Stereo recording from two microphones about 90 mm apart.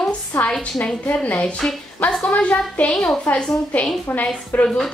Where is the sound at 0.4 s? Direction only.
10° left (ahead or behind).